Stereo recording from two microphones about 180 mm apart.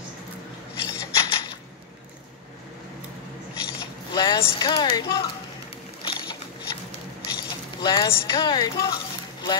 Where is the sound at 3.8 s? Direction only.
20° left (ahead or behind).